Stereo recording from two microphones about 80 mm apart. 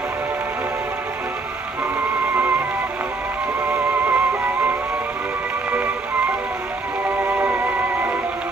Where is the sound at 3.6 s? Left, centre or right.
Centre.